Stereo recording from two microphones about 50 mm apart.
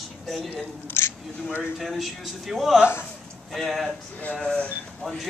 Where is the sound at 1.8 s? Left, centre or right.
Centre.